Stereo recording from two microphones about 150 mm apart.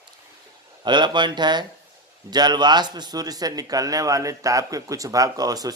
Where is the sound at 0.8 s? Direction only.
30° right (ahead or behind).